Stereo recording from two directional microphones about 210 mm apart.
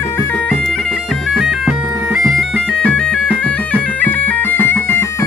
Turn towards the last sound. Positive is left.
turn(degrees=10)  # may be behind; listen again after turning